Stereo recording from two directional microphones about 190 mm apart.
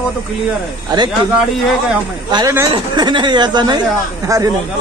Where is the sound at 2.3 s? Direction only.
20° right (ahead or behind).